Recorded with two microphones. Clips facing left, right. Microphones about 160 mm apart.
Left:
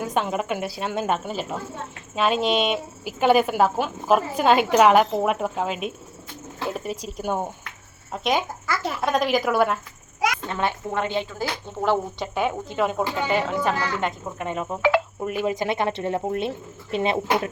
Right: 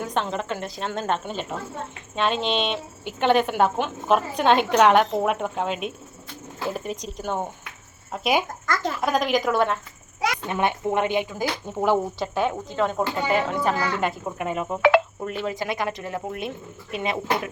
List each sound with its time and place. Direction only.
0.0 s a woman's voice: 10° left (ahead or behind)
8.1 s speech: 5° right (ahead or behind)
8.6 s a woman's voice: 10° left (ahead or behind)
10.4 s speech: 15° right (ahead or behind)
12.2 s a woman's voice: 5° left (ahead or behind)
14.8 s speech: 70° right (ahead or behind)
15.2 s speech: 10° left (ahead or behind); by 17.5 s 30° left (ahead or behind)